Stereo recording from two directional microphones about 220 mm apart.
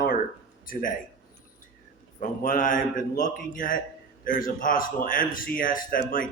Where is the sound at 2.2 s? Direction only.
35° left (ahead or behind).